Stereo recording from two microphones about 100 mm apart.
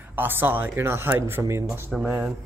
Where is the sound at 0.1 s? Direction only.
20° right (ahead or behind).